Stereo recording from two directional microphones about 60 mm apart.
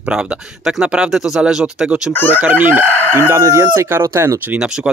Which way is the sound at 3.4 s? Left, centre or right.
Right.